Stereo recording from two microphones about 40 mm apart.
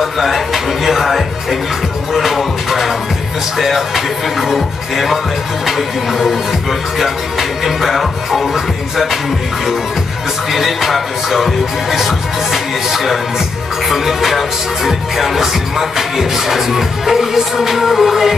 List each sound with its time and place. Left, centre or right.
0.0 s music: centre
10.5 s music: centre